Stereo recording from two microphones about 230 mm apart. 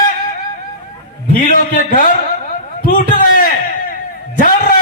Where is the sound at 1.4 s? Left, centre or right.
Left.